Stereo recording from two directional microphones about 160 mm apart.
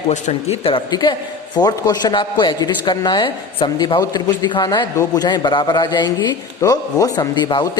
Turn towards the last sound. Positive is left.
turn(degrees=30)  # may be behind; listen again after turning